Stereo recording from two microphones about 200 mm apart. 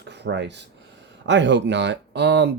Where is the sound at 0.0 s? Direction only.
60° right (ahead or behind).